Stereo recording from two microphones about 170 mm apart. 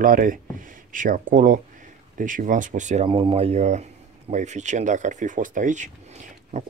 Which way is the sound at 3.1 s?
30° right (ahead or behind).